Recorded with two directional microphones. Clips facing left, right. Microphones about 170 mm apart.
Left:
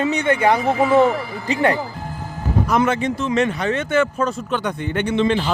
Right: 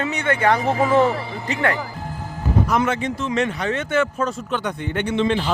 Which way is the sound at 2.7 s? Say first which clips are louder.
Left 3 dB; 35° left (ahead or behind).